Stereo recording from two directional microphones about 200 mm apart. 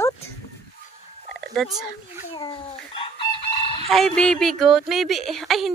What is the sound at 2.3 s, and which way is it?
Speech, 25° left (ahead or behind).